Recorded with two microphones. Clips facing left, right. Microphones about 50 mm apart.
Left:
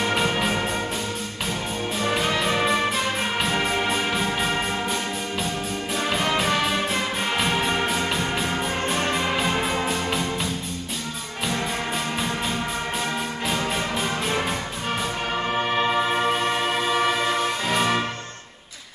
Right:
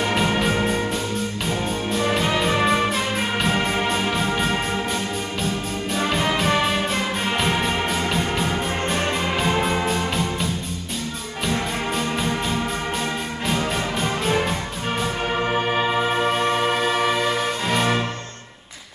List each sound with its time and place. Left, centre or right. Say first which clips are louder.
0.4 s music: right 3 dB; centre
2.0 s music: right 2 dB; centre
5.9 s music: right 2 dB; centre
13.5 s music: right 3 dB; centre